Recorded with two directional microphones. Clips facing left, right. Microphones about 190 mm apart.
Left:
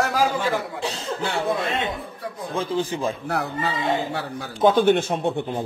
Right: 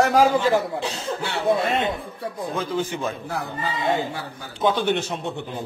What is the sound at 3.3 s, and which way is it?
Speech, 70° left (ahead or behind).